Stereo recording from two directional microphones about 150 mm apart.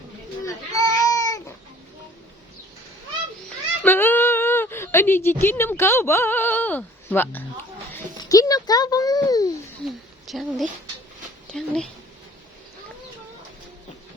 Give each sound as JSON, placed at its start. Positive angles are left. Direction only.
{"t": 0.4, "sound": "a sound", "side_deg": 20}
{"t": 3.8, "sound": "speech", "side_deg": 15}
{"t": 8.2, "sound": "a child's voice", "side_deg": 25}
{"t": 10.2, "sound": "speech", "side_deg": 0}